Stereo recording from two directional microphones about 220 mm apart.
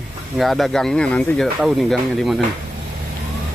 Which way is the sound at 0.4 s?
Centre (ahead or behind).